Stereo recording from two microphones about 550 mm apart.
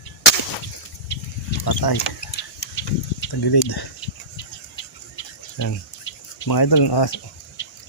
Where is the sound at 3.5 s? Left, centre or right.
Left.